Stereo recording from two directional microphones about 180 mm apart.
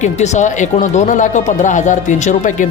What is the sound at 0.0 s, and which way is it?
Speech, 40° left (ahead or behind).